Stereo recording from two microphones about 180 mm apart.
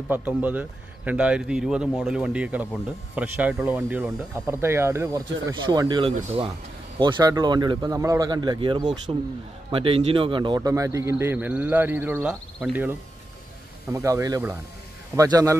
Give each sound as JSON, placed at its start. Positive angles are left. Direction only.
{"t": 0.1, "sound": "speech", "side_deg": -10}
{"t": 13.8, "sound": "speech", "side_deg": -15}